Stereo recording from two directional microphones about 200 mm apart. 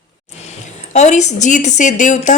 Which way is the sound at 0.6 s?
35° left (ahead or behind).